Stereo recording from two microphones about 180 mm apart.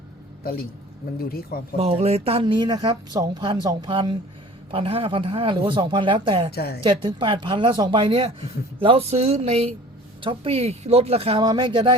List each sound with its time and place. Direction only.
0.4 s speech: 55° left (ahead or behind)
1.8 s speech: 35° right (ahead or behind)
6.5 s speech: 60° left (ahead or behind)
6.8 s speech: 25° right (ahead or behind)